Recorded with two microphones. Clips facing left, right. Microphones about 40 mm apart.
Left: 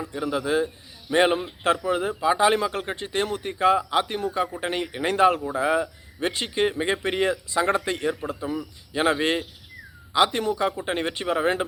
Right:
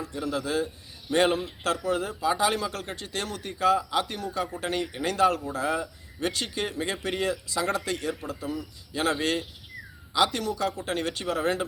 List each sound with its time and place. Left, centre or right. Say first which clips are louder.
0.0 s speech: left 3 dB; left